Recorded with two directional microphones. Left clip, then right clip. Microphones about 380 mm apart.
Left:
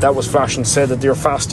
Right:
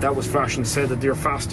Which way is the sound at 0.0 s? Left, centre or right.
Centre.